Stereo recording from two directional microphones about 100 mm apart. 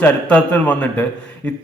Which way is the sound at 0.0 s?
15° left (ahead or behind).